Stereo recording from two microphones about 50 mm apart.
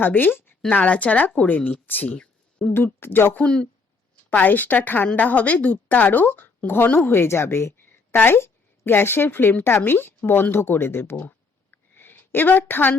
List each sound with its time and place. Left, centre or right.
0.0 s speech: left
0.7 s a woman's voice: left
2.0 s a sound: left
2.7 s speech: left
3.4 s speech: centre
4.3 s a woman's voice: left
7.1 s speech: left
8.1 s speech: left
11.3 s a sound: left